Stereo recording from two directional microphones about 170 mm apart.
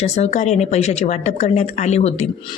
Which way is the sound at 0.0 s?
40° left (ahead or behind).